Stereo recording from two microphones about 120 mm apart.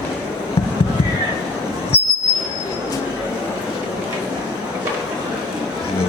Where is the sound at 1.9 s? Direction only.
55° left (ahead or behind).